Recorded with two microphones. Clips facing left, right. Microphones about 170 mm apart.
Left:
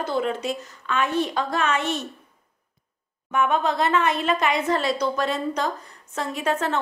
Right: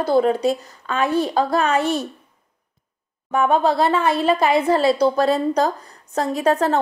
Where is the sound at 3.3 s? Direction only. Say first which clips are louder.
Right 5 dB; 35° right (ahead or behind).